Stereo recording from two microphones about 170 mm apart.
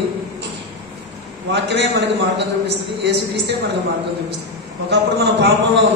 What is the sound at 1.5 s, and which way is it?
A man's voice, 90° right.